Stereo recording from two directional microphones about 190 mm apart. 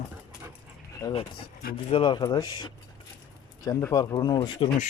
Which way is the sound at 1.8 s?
25° left (ahead or behind).